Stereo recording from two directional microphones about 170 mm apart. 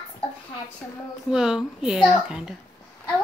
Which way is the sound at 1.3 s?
5° right (ahead or behind).